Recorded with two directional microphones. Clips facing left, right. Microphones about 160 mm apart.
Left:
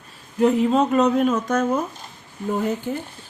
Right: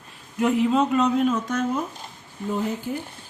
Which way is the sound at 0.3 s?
35° left (ahead or behind).